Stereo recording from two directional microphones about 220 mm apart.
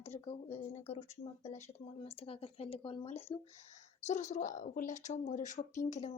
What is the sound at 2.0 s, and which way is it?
A woman's voice, 25° left (ahead or behind).